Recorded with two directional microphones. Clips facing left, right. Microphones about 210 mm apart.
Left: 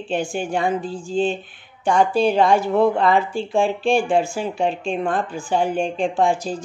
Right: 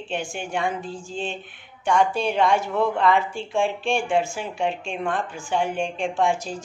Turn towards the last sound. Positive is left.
turn(degrees=35)  # may be behind; listen again after turning